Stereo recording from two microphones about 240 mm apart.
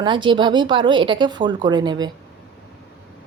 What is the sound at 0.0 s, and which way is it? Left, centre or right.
A woman's voice, centre.